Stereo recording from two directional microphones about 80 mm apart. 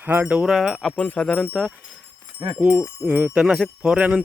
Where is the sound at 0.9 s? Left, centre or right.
Centre.